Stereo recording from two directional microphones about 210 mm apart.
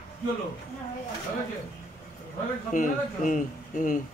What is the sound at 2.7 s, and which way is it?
A man's voice, 40° left (ahead or behind).